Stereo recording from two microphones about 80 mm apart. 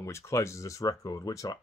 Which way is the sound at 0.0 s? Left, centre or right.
Left.